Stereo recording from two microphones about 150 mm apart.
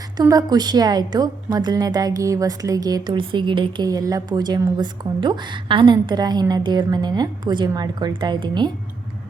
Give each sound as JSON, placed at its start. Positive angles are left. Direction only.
{"t": 0.2, "sound": "a woman's voice", "side_deg": -25}